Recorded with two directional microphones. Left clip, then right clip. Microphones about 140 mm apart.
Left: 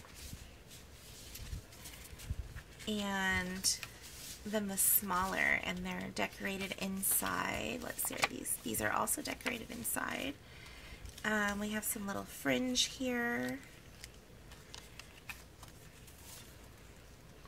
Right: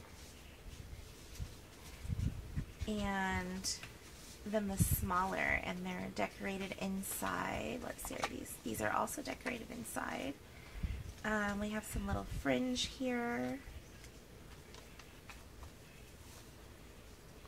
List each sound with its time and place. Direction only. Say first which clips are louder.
2.9 s speech: left 3 dB; 15° left (ahead or behind)